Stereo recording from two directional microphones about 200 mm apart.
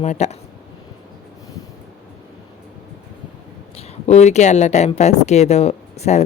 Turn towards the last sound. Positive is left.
turn(degrees=35)  # may be behind; listen again after turning